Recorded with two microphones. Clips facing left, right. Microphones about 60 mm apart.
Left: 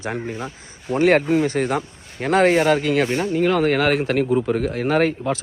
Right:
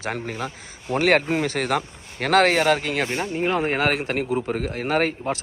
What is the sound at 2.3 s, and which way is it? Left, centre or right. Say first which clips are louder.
Speech: left 2 dB; right.